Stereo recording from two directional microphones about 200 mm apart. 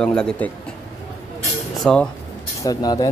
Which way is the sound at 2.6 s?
20° left (ahead or behind).